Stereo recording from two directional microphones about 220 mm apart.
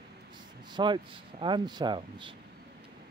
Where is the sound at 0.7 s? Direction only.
20° right (ahead or behind).